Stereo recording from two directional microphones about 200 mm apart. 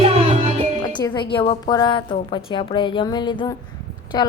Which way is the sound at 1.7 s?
20° left (ahead or behind).